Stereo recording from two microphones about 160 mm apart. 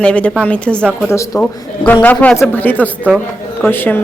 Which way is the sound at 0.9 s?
5° right (ahead or behind).